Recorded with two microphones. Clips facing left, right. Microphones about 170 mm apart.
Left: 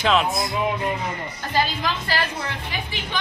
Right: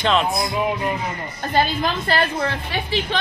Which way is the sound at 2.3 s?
60° right (ahead or behind).